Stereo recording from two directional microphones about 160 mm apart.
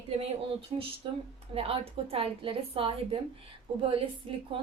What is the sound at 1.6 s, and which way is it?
A woman's voice, 35° right (ahead or behind).